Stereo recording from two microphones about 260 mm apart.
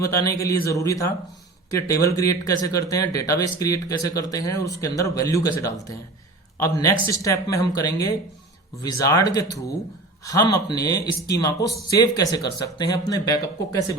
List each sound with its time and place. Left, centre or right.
0.0 s a man's voice: centre